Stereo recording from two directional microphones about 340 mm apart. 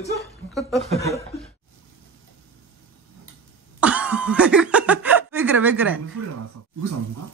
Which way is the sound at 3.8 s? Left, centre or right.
Centre.